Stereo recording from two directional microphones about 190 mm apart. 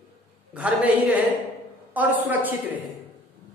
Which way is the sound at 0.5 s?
5° right (ahead or behind).